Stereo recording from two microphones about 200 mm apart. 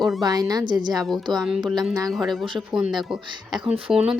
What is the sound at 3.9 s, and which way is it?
Speech, 5° right (ahead or behind).